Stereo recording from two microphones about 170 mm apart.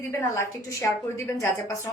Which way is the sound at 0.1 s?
15° left (ahead or behind).